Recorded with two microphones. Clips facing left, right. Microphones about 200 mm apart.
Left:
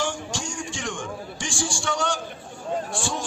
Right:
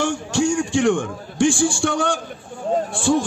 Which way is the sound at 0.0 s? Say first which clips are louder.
Right 9 dB; 65° right (ahead or behind).